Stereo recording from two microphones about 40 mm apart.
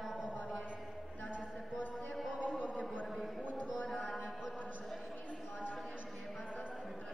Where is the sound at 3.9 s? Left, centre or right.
Left.